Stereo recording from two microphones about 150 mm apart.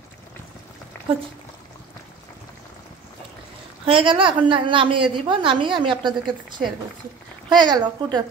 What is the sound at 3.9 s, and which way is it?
A woman's voice, 35° right (ahead or behind).